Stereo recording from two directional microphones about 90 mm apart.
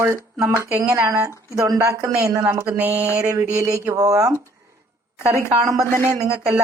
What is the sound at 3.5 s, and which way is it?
Speech, 35° right (ahead or behind).